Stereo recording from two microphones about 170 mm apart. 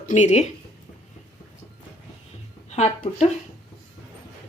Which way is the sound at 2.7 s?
40° left (ahead or behind).